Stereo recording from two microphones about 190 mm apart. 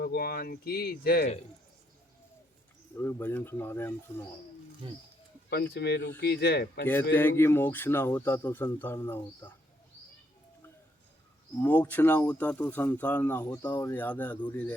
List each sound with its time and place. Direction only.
0.0 s speech: 55° left (ahead or behind)
2.9 s speech: 15° left (ahead or behind)
4.8 s speech: 25° right (ahead or behind)
5.7 s speech: 60° left (ahead or behind)
6.8 s speech: 10° left (ahead or behind)
11.6 s speech: 10° left (ahead or behind)